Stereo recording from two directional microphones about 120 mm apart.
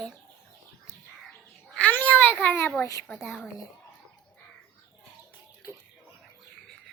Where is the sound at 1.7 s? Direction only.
10° left (ahead or behind).